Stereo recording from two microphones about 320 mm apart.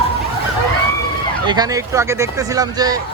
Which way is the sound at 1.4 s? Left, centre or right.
Centre.